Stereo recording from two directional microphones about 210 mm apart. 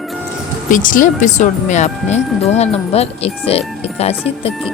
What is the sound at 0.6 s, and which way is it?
Music, 40° left (ahead or behind).